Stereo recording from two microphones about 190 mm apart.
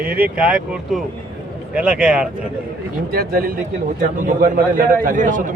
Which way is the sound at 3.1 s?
50° right (ahead or behind).